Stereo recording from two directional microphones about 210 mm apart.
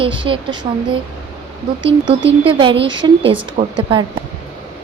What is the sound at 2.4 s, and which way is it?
Speech, 25° right (ahead or behind).